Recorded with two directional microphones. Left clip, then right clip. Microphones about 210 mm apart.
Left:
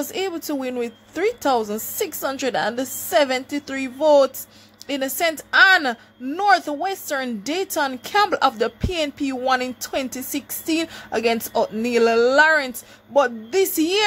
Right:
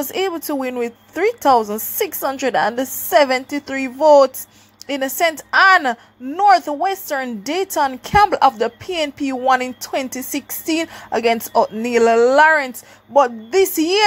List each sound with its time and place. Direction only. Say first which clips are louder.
0.0 s a woman's voice: right 4 dB; 10° right (ahead or behind)
6.5 s a woman's voice: right 4 dB; 5° right (ahead or behind)